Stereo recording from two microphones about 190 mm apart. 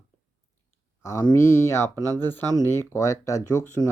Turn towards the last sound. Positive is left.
turn(degrees=15)  # may be behind; listen again after turning